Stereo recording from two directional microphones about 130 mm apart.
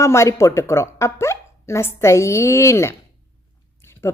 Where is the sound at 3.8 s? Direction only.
15° left (ahead or behind).